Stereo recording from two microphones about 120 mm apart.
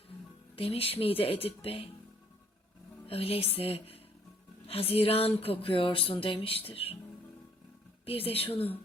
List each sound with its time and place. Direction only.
0.5 s speech: 55° left (ahead or behind)
3.1 s speech: 55° left (ahead or behind)
8.0 s speech: 55° left (ahead or behind)